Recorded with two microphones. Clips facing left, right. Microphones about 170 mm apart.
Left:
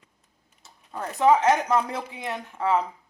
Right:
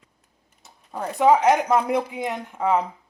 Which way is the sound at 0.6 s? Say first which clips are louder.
Right 3 dB; 15° right (ahead or behind).